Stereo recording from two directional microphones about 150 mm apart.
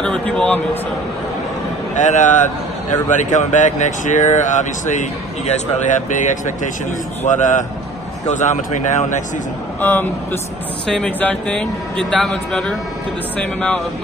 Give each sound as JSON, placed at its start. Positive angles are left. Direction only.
{"t": 0.0, "sound": "a man's voice", "side_deg": 5}
{"t": 2.0, "sound": "speech", "side_deg": 55}
{"t": 9.8, "sound": "a man's voice", "side_deg": 15}